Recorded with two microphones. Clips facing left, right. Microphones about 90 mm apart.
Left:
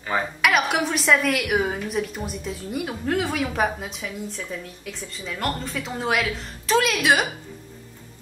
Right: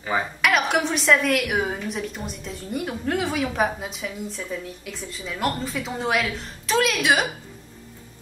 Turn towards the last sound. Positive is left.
turn(degrees=0)  # may be behind; listen again after turning